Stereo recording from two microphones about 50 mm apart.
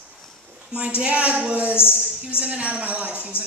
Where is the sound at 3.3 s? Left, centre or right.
Left.